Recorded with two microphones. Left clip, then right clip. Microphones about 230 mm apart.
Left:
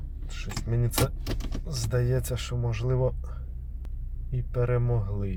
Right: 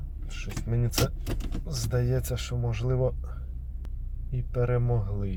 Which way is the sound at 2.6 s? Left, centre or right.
Centre.